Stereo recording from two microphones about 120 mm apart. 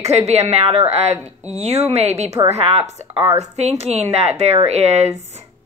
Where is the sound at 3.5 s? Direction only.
65° right (ahead or behind).